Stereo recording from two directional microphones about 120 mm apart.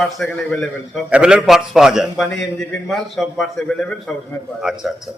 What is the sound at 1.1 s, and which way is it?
A man's voice, 10° right (ahead or behind).